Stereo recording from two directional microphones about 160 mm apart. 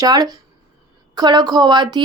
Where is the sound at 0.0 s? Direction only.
25° right (ahead or behind).